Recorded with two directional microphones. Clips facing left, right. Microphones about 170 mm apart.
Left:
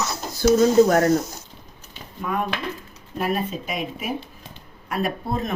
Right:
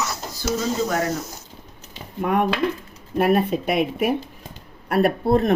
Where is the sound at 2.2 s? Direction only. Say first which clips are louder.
Right 6 dB; 65° right (ahead or behind).